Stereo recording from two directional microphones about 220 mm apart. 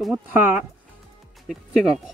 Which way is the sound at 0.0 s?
5° right (ahead or behind).